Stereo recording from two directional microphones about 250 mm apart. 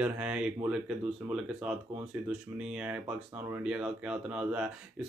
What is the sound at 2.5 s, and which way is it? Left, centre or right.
Speech, centre.